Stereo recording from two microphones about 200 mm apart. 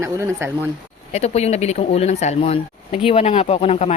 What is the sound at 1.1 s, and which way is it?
Speech, 35° left (ahead or behind).